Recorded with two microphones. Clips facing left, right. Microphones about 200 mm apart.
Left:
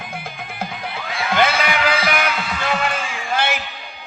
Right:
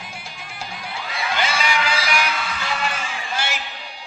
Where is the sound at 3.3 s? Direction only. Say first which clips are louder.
Left 7 dB; 55° left (ahead or behind).